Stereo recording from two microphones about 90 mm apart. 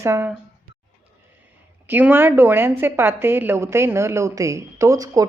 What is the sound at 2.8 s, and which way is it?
A woman's voice, 25° right (ahead or behind).